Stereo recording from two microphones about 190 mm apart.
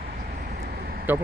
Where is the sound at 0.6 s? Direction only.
55° right (ahead or behind).